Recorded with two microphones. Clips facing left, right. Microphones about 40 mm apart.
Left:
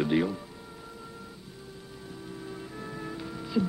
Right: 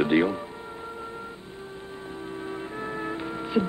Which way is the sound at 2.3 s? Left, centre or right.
Right.